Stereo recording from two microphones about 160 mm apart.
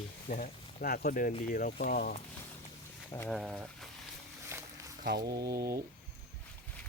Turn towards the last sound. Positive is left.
turn(degrees=-75)  # may be behind; listen again after turning